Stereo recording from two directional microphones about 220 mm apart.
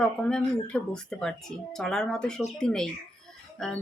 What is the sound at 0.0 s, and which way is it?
Speech, 5° left (ahead or behind).